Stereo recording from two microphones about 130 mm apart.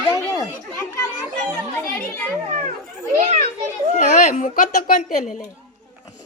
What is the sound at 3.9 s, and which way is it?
Speech, 70° left (ahead or behind).